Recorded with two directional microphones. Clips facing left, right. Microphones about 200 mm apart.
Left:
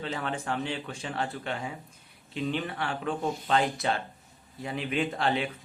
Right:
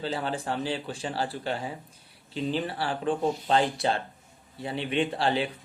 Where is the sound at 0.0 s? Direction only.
30° right (ahead or behind).